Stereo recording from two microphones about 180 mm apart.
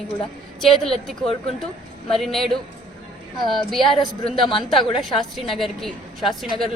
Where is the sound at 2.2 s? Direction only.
Centre (ahead or behind).